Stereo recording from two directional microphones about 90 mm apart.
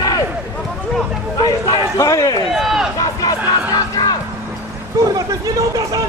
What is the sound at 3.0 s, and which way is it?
Crowd, 45° left (ahead or behind).